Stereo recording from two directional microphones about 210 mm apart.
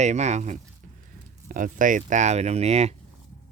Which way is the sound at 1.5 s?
40° right (ahead or behind).